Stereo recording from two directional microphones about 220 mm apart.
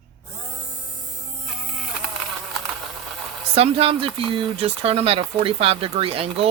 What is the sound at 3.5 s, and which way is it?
Speech, 25° right (ahead or behind).